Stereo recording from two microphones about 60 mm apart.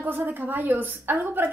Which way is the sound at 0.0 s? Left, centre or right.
Right.